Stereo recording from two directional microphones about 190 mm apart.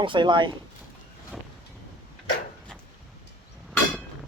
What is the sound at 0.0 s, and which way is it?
Speech, 25° right (ahead or behind).